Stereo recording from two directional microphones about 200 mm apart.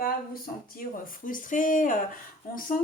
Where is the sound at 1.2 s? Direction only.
40° left (ahead or behind).